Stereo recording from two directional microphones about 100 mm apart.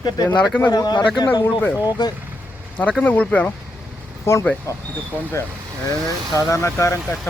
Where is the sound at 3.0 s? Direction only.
15° left (ahead or behind).